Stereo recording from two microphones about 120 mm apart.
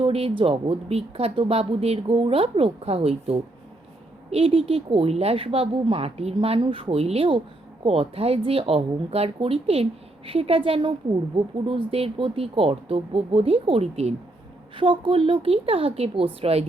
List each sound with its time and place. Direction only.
0.0 s speech: 55° right (ahead or behind)
14.8 s speech: 45° right (ahead or behind)